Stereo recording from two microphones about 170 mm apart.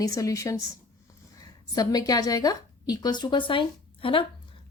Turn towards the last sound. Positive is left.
turn(degrees=30)  # may be behind; listen again after turning